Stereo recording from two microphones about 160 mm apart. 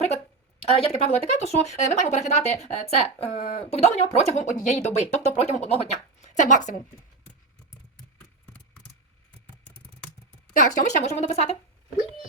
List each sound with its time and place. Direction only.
0.7 s speech: 40° left (ahead or behind)
10.8 s speech: 45° left (ahead or behind)